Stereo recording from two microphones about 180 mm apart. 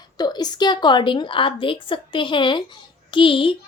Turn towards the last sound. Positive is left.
turn(degrees=30)  # may be behind; listen again after turning